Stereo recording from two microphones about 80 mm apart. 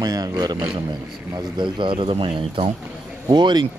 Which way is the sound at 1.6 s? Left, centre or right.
Right.